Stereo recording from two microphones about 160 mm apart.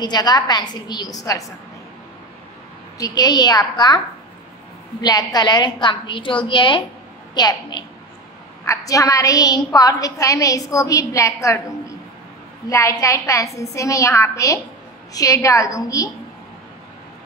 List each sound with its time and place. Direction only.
0.0 s a woman's voice: 25° left (ahead or behind)
3.0 s a woman's voice: 25° left (ahead or behind)
5.0 s a woman's voice: 25° left (ahead or behind)